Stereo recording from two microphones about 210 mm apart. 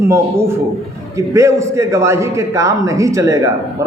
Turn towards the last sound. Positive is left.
turn(degrees=-15)  # may be behind; listen again after turning